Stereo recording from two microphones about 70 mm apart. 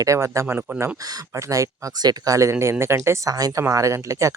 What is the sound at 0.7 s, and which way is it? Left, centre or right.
Speech, right.